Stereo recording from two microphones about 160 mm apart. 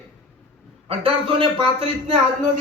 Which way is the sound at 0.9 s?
35° right (ahead or behind).